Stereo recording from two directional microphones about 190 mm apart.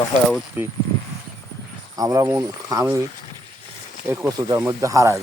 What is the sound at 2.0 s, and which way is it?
Speech, 20° right (ahead or behind).